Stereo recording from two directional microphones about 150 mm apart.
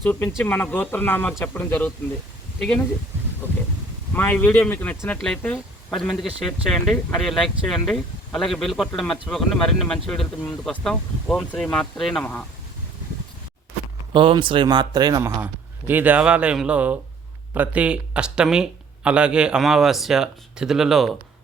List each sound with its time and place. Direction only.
0.0 s speech: 10° left (ahead or behind)
2.6 s speech: 5° left (ahead or behind)
4.1 s speech: 10° left (ahead or behind)
14.1 s speech: 35° right (ahead or behind)
15.9 s speech: 10° right (ahead or behind)